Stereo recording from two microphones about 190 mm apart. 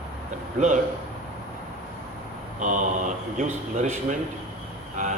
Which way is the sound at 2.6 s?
40° right (ahead or behind).